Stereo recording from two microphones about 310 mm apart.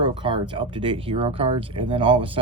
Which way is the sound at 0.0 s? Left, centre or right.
Centre.